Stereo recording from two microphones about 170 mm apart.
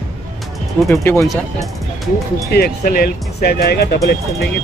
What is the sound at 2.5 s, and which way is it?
Speech, 65° left (ahead or behind).